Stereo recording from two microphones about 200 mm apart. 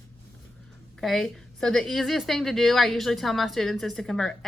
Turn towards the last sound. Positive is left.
turn(degrees=0)  # may be behind; listen again after turning